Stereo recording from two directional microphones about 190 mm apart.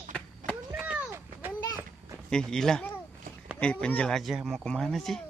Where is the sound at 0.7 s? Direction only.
5° right (ahead or behind).